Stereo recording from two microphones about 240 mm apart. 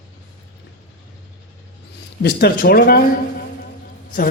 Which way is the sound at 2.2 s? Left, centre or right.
Left.